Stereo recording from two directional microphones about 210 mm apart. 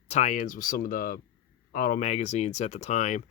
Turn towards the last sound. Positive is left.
turn(degrees=35)  # may be behind; listen again after turning